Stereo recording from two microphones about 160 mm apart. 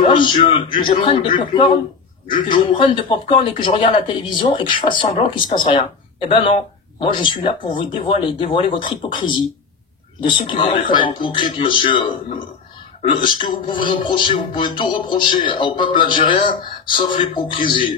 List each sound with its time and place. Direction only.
0.1 s speech: 30° left (ahead or behind)